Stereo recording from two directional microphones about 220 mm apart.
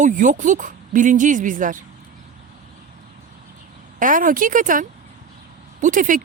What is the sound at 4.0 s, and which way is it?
Speech, 40° right (ahead or behind).